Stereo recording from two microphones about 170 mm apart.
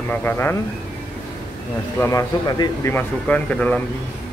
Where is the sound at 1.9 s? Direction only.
15° left (ahead or behind).